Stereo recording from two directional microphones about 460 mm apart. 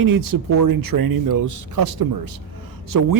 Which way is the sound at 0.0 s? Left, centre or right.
Right.